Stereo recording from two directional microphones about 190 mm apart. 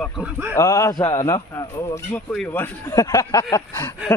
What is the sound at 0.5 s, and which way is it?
A man's voice, 15° left (ahead or behind).